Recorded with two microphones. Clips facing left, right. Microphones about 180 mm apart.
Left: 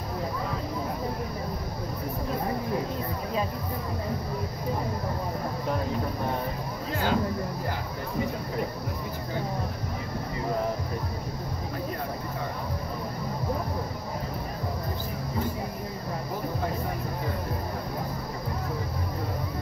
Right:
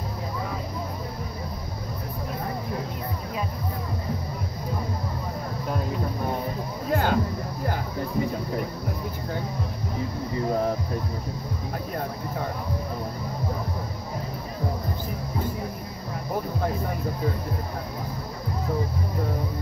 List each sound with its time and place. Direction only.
6.9 s music: 55° right (ahead or behind)